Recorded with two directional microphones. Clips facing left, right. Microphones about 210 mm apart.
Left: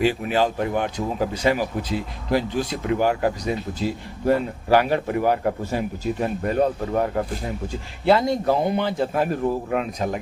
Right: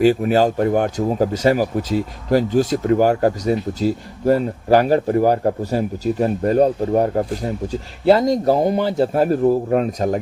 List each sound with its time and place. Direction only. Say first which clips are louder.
0.0 s speech: right 6 dB; 45° right (ahead or behind)